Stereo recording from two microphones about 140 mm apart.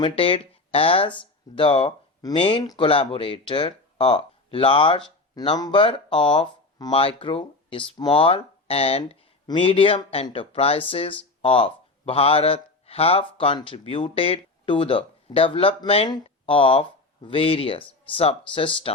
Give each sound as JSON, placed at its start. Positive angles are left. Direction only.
{"t": 0.0, "sound": "speech", "side_deg": 40}